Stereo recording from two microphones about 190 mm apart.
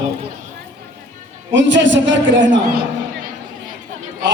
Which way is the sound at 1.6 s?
75° right (ahead or behind).